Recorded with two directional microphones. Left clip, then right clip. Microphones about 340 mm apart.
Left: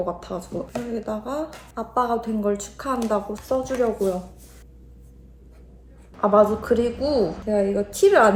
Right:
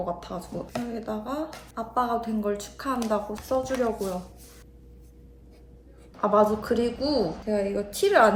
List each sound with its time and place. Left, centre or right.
0.0 s speech: centre
6.1 s speech: centre